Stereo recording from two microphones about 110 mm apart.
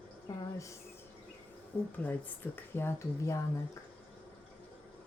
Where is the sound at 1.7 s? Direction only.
20° left (ahead or behind).